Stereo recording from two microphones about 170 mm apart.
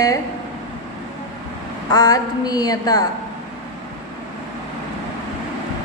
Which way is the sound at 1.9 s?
20° left (ahead or behind).